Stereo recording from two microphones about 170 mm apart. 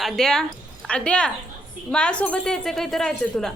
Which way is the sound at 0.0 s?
5° left (ahead or behind).